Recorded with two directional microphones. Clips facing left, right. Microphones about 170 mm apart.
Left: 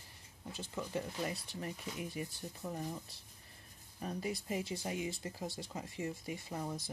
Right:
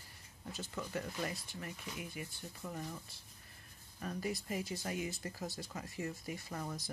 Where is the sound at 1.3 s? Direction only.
35° left (ahead or behind).